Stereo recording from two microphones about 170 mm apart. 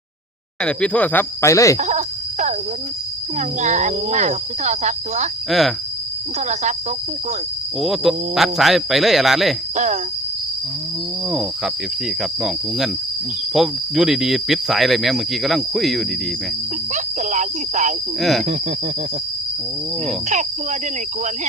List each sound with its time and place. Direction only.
0.6 s speech: 5° left (ahead or behind)
1.8 s a sound: 45° right (ahead or behind)
3.3 s speech: 45° right (ahead or behind)
5.5 s speech: centre (ahead or behind)
6.5 s speech: 40° right (ahead or behind)
7.8 s speech: centre (ahead or behind)
9.7 s speech: 45° right (ahead or behind)
11.3 s speech: centre (ahead or behind)
16.9 s speech: 45° right (ahead or behind)
18.2 s speech: centre (ahead or behind)